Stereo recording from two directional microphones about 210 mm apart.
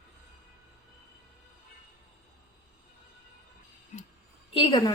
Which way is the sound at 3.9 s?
35° left (ahead or behind).